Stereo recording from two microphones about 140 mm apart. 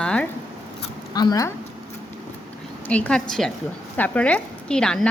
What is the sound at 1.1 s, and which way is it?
Speech, 30° left (ahead or behind).